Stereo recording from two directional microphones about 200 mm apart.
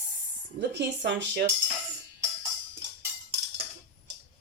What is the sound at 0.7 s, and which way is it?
Speech, 60° right (ahead or behind).